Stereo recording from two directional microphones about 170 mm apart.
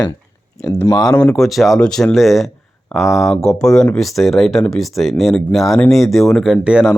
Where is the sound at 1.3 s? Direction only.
Centre (ahead or behind).